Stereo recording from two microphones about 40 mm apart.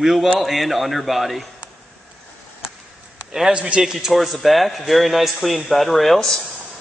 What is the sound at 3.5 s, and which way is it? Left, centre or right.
Speech, right.